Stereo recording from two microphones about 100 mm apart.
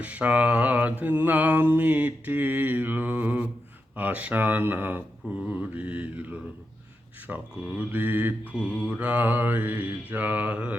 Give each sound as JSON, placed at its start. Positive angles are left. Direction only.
{"t": 0.0, "sound": "mantra", "side_deg": -15}